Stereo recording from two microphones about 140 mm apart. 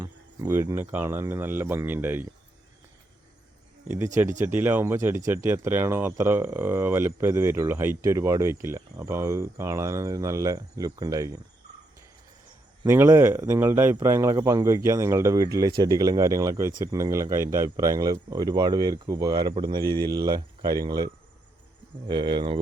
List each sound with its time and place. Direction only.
0.0 s speech: 20° right (ahead or behind)
3.8 s speech: 20° right (ahead or behind)
12.8 s speech: 20° right (ahead or behind); by 22.6 s 35° right (ahead or behind)